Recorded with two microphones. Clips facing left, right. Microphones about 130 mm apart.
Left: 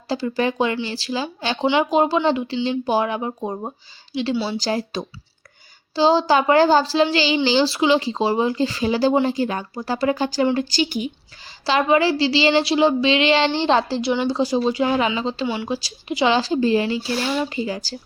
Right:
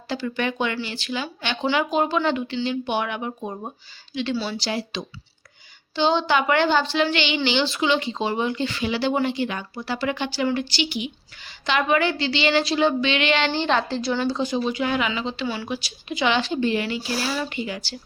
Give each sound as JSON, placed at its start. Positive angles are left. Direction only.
{"t": 0.1, "sound": "a woman's voice", "side_deg": 35}
{"t": 5.9, "sound": "a woman's voice", "side_deg": 35}
{"t": 15.4, "sound": "a woman's voice", "side_deg": 25}